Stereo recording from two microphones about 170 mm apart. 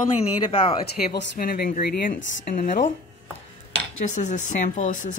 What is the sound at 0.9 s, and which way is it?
Speech, 70° left (ahead or behind).